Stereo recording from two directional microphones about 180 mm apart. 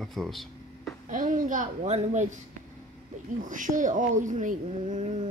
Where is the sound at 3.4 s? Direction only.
45° right (ahead or behind).